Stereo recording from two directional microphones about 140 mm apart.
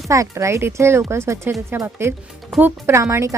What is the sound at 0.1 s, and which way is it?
A woman's voice, 20° right (ahead or behind).